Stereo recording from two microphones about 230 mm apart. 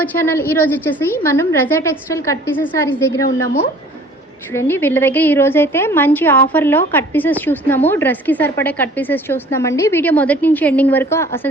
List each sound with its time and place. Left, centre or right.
0.0 s a woman's voice: centre
4.5 s a woman's voice: centre